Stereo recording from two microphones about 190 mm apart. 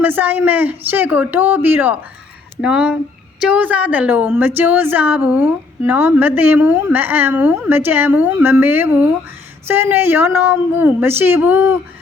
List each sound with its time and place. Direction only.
0.0 s a woman's voice: 10° right (ahead or behind)